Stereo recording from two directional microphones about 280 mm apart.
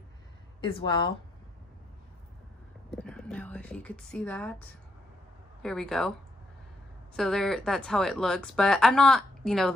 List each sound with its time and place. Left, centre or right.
0.6 s speech: centre
2.9 s speech: centre
7.2 s speech: centre